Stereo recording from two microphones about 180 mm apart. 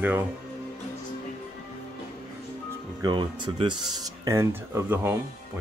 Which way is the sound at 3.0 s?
25° right (ahead or behind).